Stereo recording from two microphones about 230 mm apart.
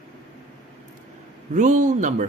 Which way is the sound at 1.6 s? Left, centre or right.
Right.